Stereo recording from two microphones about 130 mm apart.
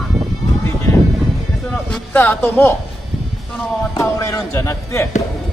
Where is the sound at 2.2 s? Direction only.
15° left (ahead or behind).